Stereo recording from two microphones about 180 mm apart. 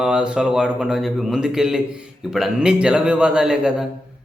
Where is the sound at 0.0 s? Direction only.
5° right (ahead or behind).